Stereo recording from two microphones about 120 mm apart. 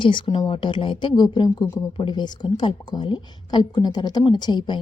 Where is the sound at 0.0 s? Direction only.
45° left (ahead or behind).